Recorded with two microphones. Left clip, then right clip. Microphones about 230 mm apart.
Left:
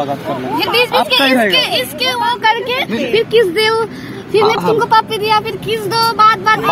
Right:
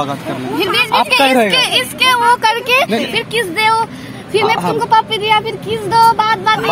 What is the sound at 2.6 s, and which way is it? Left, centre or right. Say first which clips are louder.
Vehicle: right 4 dB; right.